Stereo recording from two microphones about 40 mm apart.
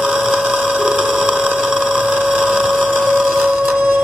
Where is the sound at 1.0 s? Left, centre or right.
Centre.